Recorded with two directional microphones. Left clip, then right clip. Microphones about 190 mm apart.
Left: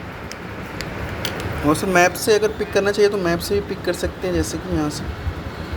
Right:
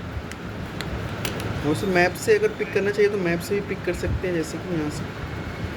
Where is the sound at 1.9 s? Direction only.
25° left (ahead or behind).